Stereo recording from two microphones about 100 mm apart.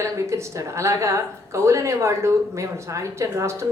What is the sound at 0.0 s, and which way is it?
A woman's voice, 30° right (ahead or behind).